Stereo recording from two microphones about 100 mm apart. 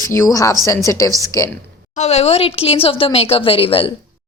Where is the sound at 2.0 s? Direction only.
90° left; by 3.9 s 65° left (ahead or behind).